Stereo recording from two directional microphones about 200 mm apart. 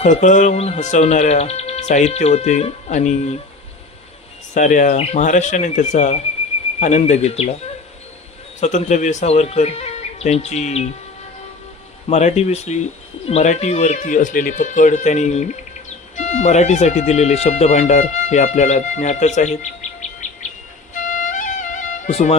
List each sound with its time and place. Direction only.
0.0 s speech: 40° left (ahead or behind)
4.5 s speech: 40° left (ahead or behind)
8.6 s speech: 35° left (ahead or behind)
12.0 s speech: 35° left (ahead or behind)
20.9 s music: 40° left (ahead or behind)